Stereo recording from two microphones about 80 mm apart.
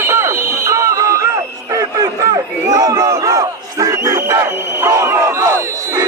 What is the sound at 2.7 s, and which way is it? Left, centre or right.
Crowd, right.